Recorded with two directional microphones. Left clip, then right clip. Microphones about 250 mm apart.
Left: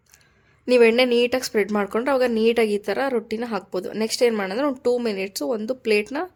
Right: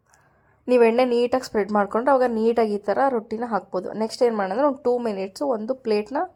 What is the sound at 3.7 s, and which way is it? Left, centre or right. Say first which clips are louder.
Speech: left 1 dB; centre.